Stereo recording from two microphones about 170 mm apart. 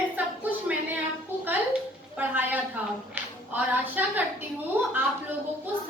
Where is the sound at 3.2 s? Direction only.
10° right (ahead or behind).